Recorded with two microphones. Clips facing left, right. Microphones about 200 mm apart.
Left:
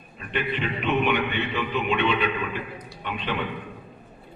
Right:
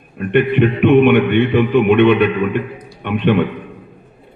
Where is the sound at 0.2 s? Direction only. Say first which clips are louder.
Right 15 dB; 60° right (ahead or behind).